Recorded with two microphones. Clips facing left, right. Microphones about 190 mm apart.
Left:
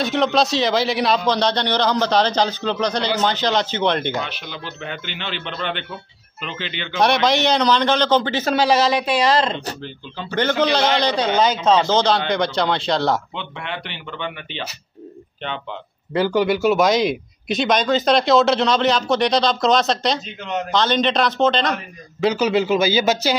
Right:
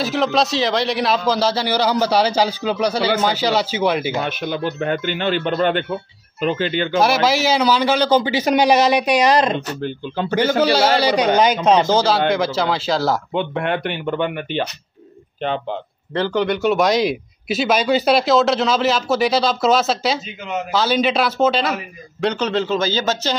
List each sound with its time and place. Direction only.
0.0 s a man's voice: centre (ahead or behind)
4.2 s a man's voice: 50° right (ahead or behind)
7.0 s a man's voice: 5° right (ahead or behind)
9.8 s a man's voice: 50° right (ahead or behind)
10.6 s a man's voice: 5° right (ahead or behind)
13.3 s a man's voice: 50° right (ahead or behind)
16.1 s speech: 10° left (ahead or behind); by 22.3 s 5° right (ahead or behind)
22.3 s speech: 10° left (ahead or behind)